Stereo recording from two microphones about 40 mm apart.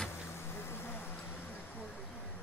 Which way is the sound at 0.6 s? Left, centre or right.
Left.